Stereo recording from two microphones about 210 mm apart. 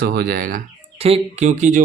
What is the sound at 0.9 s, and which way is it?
Speech, 30° right (ahead or behind).